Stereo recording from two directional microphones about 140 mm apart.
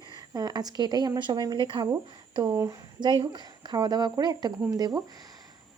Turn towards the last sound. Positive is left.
turn(degrees=-30)  # may be behind; listen again after turning